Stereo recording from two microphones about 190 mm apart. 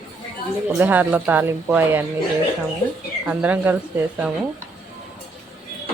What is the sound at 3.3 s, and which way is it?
Speech, 10° right (ahead or behind).